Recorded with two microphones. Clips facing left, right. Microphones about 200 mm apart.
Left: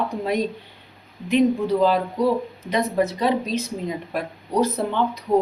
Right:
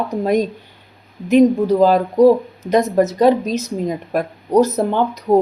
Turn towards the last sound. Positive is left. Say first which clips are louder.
# right 5 dB
turn(degrees=-45)  # may be behind; listen again after turning